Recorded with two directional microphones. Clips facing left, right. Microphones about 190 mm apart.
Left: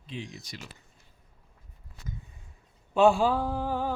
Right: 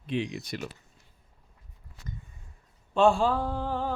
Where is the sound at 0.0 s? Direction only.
70° right (ahead or behind).